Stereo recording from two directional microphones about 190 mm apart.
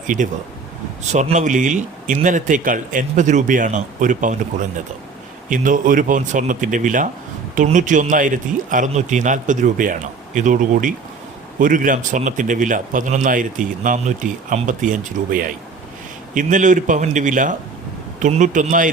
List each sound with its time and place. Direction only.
1.0 s speech: 35° right (ahead or behind)
5.5 s a man's voice: 45° right (ahead or behind)